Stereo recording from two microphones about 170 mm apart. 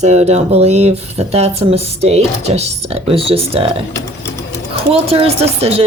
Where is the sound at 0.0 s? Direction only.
40° right (ahead or behind).